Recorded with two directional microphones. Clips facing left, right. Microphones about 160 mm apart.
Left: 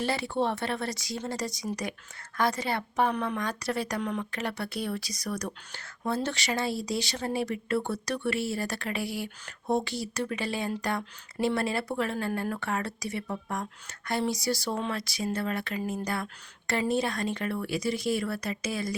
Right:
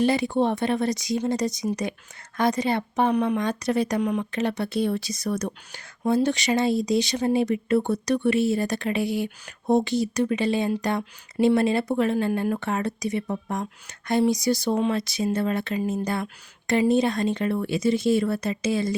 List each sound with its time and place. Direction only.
0.0 s speech: 15° right (ahead or behind)